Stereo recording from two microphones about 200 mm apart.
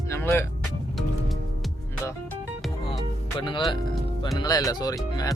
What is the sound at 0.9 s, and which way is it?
Music, centre (ahead or behind).